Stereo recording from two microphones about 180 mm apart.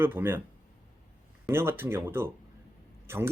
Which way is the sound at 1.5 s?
15° right (ahead or behind).